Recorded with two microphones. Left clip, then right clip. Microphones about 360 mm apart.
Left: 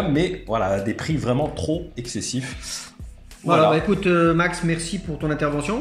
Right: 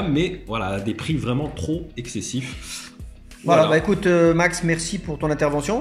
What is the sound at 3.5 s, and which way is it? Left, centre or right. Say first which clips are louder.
Speech: right 1 dB; centre.